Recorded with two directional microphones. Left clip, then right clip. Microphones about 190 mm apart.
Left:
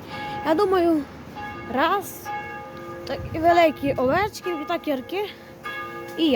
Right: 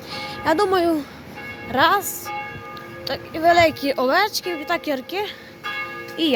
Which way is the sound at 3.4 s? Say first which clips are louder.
Right 2 dB; 15° left (ahead or behind).